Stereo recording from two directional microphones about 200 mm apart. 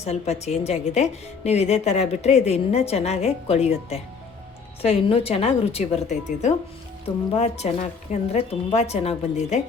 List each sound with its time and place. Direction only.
0.0 s a woman's voice: 35° left (ahead or behind)